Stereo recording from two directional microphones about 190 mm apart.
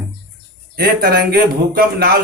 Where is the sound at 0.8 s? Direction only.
55° right (ahead or behind).